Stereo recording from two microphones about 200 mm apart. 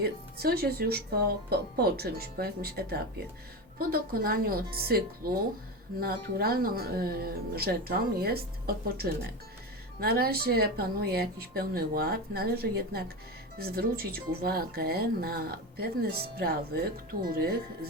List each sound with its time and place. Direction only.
0.0 s speech: 50° right (ahead or behind)